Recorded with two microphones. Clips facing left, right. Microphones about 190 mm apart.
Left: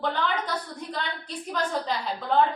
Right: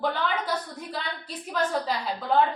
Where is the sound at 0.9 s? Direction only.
5° right (ahead or behind).